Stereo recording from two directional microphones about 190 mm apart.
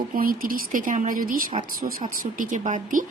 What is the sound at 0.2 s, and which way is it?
A woman's voice, 50° right (ahead or behind).